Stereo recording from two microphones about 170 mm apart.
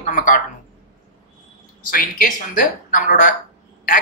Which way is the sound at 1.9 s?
55° left (ahead or behind).